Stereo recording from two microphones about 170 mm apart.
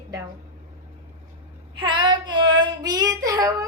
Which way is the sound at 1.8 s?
25° right (ahead or behind).